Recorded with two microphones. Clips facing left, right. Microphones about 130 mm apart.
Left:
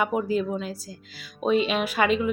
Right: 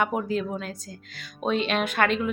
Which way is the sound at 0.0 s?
5° left (ahead or behind).